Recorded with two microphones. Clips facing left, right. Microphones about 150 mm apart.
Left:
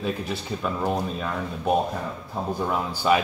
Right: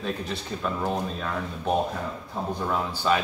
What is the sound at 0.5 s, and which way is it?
Speech, 5° left (ahead or behind).